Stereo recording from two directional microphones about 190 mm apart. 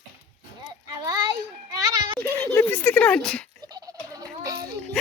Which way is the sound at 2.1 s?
10° left (ahead or behind).